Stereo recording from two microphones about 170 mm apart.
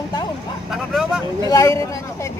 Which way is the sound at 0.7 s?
Centre (ahead or behind).